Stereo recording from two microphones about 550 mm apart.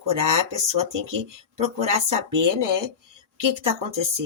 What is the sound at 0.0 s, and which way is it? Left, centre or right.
Speech, right.